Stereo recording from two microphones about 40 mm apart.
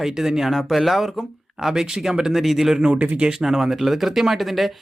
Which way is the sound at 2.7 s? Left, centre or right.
Centre.